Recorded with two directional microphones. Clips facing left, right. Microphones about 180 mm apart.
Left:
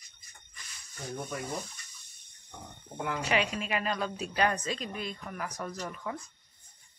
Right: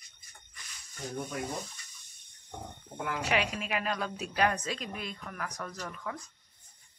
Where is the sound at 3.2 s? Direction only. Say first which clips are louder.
Left 1 dB; centre (ahead or behind).